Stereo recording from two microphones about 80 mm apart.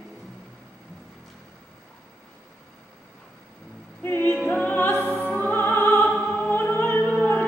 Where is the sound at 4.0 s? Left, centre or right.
Left.